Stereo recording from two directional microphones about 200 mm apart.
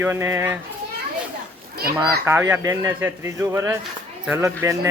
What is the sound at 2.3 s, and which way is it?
Speech, 10° right (ahead or behind).